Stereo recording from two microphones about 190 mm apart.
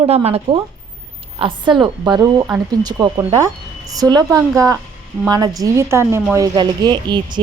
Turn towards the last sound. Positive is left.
turn(degrees=-25)  # may be behind; listen again after turning